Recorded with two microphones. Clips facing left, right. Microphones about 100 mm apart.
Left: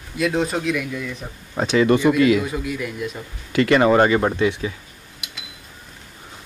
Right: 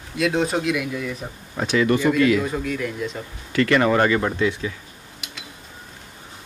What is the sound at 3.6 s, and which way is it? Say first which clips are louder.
Speech: left 3 dB; 20° left (ahead or behind).